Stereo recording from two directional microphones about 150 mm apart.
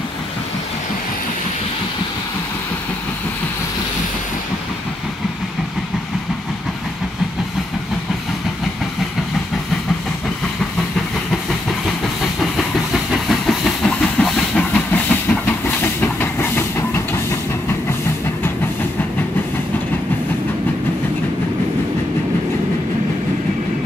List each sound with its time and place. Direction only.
13.1 s train: centre (ahead or behind); by 17.2 s 15° left (ahead or behind)